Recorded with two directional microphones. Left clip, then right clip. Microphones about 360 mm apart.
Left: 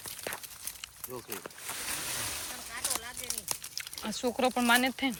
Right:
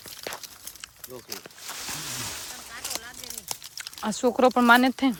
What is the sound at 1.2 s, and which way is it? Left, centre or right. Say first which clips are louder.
Speech: right 2 dB; centre.